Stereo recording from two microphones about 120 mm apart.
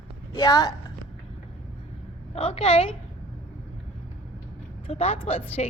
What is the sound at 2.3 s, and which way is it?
Speech, 55° left (ahead or behind).